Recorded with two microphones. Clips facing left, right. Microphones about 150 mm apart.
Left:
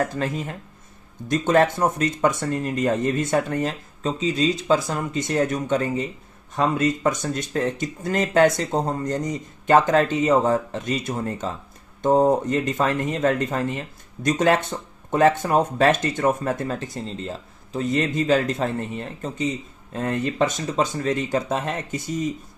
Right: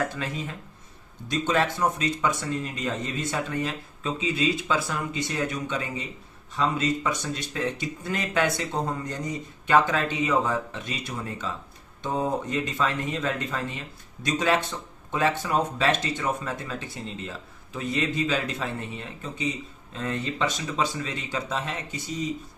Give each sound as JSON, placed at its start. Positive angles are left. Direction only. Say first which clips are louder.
{"t": 0.0, "sound": "speech", "louder": "left 5 dB", "side_deg": 40}